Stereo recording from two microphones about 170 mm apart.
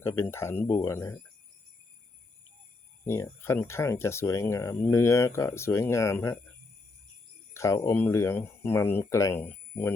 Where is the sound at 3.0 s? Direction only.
15° left (ahead or behind).